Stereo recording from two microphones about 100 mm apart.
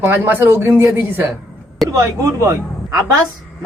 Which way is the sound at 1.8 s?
35° right (ahead or behind).